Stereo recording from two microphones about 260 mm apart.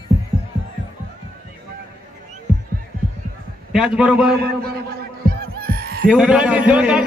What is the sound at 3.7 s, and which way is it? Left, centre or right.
Speech, centre.